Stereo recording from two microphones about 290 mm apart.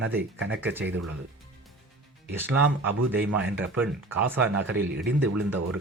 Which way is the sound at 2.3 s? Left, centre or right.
Centre.